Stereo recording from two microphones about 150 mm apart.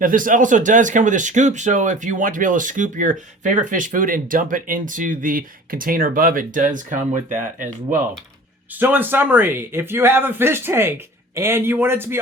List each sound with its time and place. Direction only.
0.0 s speech: 65° right (ahead or behind)
8.7 s a man's voice: 10° right (ahead or behind)